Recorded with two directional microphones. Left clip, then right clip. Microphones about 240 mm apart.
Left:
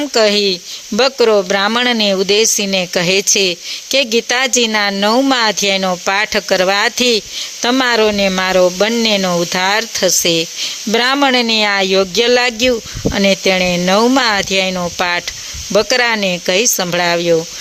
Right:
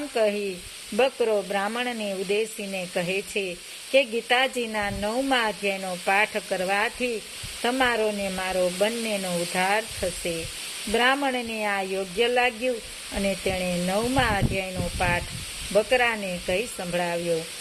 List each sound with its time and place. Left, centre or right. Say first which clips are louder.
0.1 s speech: left 12 dB; left